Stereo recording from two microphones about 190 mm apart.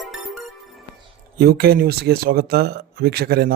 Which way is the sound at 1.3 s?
55° right (ahead or behind).